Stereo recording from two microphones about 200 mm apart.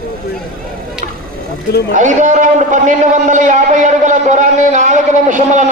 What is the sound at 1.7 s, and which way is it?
Speech, 55° left (ahead or behind).